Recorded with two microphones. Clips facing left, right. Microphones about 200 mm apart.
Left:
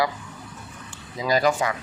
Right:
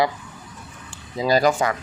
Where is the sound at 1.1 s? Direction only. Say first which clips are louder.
Right 3 dB; 30° right (ahead or behind).